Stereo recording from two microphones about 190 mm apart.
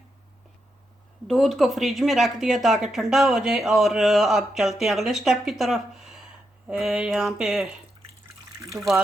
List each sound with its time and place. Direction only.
1.3 s speech: centre (ahead or behind)